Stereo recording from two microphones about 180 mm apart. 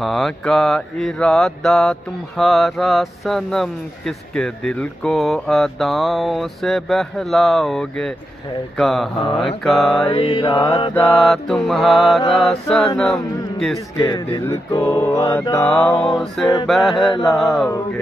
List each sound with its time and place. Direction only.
0.0 s mantra: centre (ahead or behind)
10.0 s mantra: 30° left (ahead or behind)
11.0 s mantra: 5° left (ahead or behind)
13.9 s mantra: 20° left (ahead or behind); by 17.6 s centre (ahead or behind)